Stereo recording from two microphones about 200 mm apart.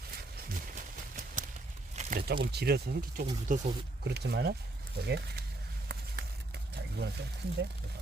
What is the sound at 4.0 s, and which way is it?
Speech, 55° right (ahead or behind).